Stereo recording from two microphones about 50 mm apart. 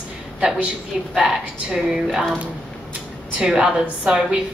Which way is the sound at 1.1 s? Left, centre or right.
Centre.